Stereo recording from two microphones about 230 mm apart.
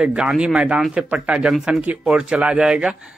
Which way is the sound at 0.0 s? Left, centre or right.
Centre.